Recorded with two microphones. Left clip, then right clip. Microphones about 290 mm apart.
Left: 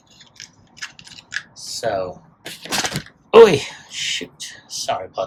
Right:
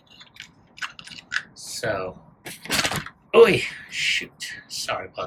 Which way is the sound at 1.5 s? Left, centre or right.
Centre.